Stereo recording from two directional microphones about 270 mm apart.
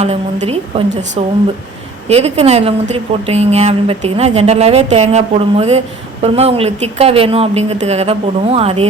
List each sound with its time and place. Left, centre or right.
0.0 s a woman's voice: right